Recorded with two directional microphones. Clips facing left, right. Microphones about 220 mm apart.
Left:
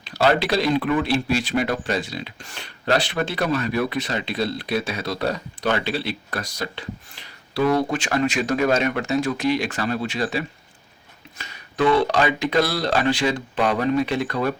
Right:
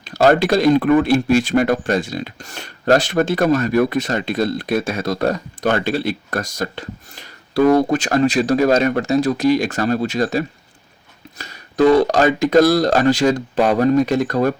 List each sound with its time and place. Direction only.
0.0 s speech: 45° right (ahead or behind)